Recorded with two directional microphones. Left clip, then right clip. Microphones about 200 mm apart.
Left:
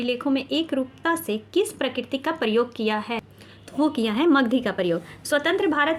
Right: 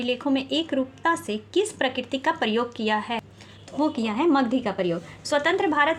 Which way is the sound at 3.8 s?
20° left (ahead or behind).